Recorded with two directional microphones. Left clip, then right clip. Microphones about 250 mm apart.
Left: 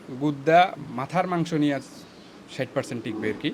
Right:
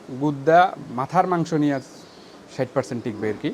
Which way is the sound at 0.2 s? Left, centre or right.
Centre.